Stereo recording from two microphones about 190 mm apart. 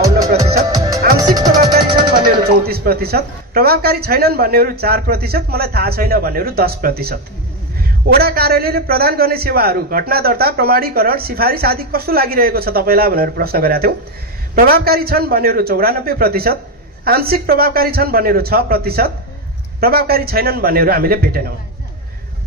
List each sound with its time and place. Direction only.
0.4 s music: 20° right (ahead or behind)
2.4 s a man's voice: 50° right (ahead or behind)